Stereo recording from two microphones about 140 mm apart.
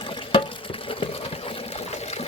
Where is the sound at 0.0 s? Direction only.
35° left (ahead or behind).